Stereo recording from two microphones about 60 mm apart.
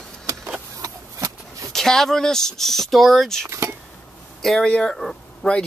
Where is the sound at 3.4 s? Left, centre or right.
Right.